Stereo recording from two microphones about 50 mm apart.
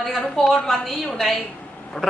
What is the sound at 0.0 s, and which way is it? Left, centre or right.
A woman's voice, centre.